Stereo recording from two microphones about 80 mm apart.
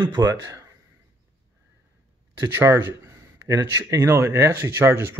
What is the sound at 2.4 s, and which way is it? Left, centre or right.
Speech, right.